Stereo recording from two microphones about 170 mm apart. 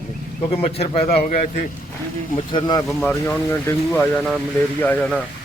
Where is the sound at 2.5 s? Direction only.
25° left (ahead or behind).